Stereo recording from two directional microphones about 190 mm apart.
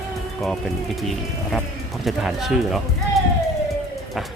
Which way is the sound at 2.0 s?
Centre (ahead or behind).